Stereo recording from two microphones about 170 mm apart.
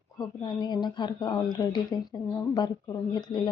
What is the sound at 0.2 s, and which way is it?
Speech, 25° left (ahead or behind).